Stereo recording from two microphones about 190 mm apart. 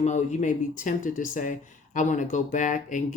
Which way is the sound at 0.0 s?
40° left (ahead or behind).